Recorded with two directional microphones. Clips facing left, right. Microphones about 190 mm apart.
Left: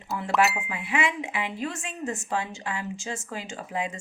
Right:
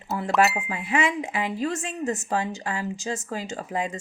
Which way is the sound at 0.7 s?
45° right (ahead or behind).